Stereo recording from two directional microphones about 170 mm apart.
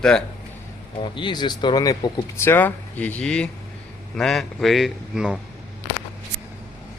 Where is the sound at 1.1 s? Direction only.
25° left (ahead or behind); by 5.4 s 5° right (ahead or behind).